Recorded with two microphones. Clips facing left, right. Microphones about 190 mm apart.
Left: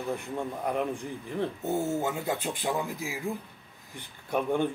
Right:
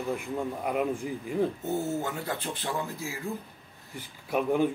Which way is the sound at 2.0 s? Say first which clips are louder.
Left 3 dB; 15° left (ahead or behind).